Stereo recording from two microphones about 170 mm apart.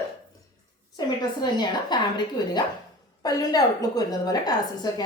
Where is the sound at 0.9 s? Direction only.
25° left (ahead or behind).